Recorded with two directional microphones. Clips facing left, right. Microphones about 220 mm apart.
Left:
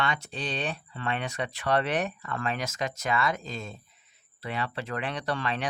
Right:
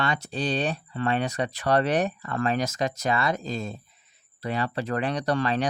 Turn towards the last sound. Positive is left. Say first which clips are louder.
# right 6 dB
turn(degrees=-40)  # may be behind; listen again after turning